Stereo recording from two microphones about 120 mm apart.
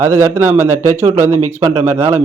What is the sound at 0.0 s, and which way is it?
A man's voice, 25° right (ahead or behind).